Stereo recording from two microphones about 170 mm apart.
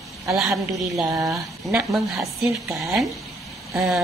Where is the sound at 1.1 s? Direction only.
20° right (ahead or behind).